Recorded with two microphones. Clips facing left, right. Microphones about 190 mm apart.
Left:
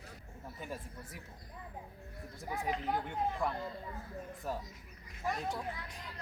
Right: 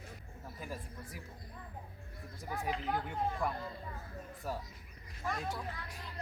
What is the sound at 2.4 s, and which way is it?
Speech, 20° left (ahead or behind).